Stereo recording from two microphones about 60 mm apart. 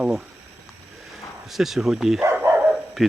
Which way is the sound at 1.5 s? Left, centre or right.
Centre.